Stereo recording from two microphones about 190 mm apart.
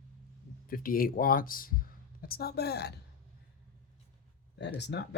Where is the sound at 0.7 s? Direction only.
50° left (ahead or behind).